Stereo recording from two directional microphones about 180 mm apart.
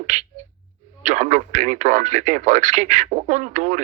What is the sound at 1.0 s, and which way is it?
Speech, 45° right (ahead or behind).